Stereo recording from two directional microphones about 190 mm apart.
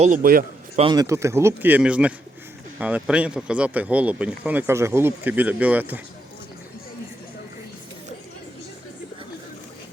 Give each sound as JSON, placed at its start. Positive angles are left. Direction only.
{"t": 0.0, "sound": "a man's voice", "side_deg": -45}
{"t": 0.8, "sound": "speech", "side_deg": -20}